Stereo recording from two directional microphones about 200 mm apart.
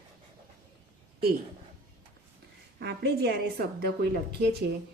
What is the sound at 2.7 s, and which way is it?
A woman's voice, 50° right (ahead or behind).